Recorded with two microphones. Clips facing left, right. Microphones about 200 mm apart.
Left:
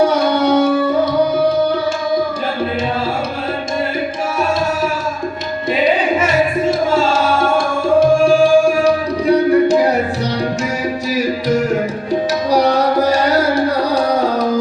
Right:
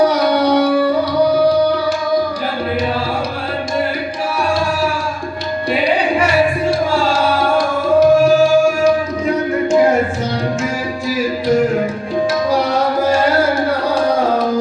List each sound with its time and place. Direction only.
0.1 s music: 25° left (ahead or behind)
5.8 s music: 20° left (ahead or behind)
12.5 s music: 40° left (ahead or behind)